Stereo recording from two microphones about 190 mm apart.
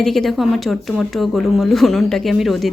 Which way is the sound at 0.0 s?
Centre (ahead or behind).